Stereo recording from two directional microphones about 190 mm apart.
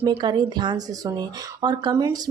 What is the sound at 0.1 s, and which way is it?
Speech, 25° right (ahead or behind).